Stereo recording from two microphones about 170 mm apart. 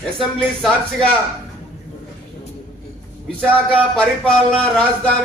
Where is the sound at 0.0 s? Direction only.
5° left (ahead or behind).